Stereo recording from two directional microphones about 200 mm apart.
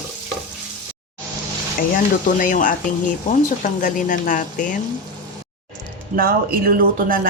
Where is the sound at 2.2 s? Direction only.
40° left (ahead or behind).